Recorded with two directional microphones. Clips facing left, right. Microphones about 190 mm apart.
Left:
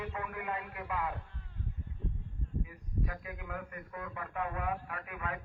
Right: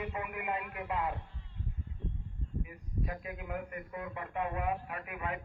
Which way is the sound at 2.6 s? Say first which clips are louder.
Right 2 dB; 20° right (ahead or behind).